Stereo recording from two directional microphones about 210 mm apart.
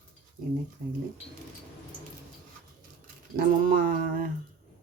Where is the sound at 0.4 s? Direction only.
40° right (ahead or behind).